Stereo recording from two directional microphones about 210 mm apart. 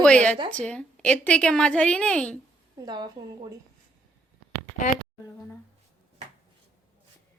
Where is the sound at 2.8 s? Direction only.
20° right (ahead or behind).